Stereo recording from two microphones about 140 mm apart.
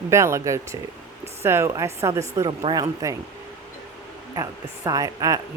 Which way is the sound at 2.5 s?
30° right (ahead or behind).